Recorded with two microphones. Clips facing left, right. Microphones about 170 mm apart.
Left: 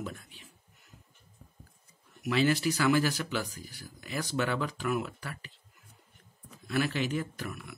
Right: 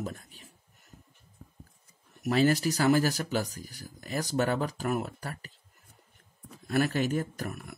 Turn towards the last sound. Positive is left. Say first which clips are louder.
# right 2 dB
turn(degrees=-45)  # may be behind; listen again after turning